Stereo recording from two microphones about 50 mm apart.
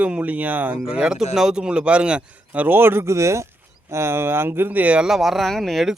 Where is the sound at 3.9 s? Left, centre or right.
Right.